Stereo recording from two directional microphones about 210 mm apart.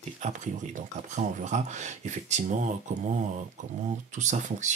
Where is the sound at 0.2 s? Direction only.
35° right (ahead or behind).